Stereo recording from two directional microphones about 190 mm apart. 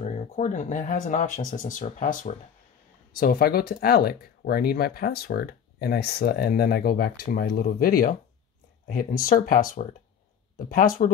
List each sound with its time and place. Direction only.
0.0 s speech: 40° left (ahead or behind)